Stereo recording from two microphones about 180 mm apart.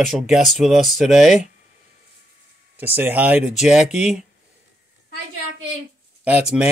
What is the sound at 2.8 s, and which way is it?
Speech, 10° right (ahead or behind).